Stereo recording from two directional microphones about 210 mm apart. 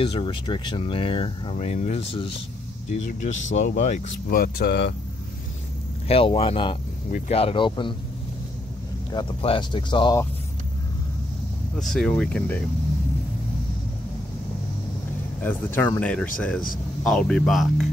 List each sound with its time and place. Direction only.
0.0 s speech: 25° left (ahead or behind); by 4.9 s 55° left (ahead or behind)
6.0 s speech: 25° left (ahead or behind)
7.1 s speech: 40° left (ahead or behind)
7.3 s speech: 25° left (ahead or behind)
9.1 s speech: 25° left (ahead or behind)
11.8 s speech: centre (ahead or behind)
15.4 s speech: 10° left (ahead or behind)